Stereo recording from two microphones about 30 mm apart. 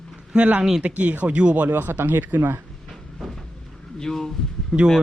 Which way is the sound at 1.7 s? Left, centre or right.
Right.